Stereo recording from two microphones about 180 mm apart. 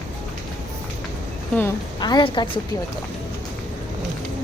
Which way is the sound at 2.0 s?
25° left (ahead or behind).